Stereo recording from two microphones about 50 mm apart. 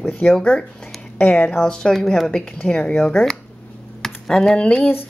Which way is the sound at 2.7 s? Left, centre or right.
Centre.